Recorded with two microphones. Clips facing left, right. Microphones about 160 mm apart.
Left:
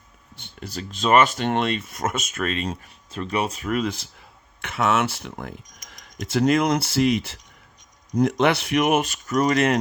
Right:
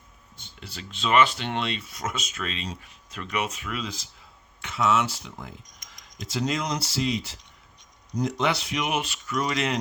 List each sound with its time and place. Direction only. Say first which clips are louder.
0.6 s speech: left 6 dB; 40° left (ahead or behind)
3.1 s speech: left 5 dB; 30° left (ahead or behind); by 9.7 s 50° left (ahead or behind)